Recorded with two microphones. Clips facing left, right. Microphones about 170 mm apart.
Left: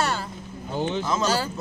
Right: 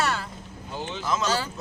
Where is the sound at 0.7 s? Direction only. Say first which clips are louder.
Left 8 dB; 55° left (ahead or behind).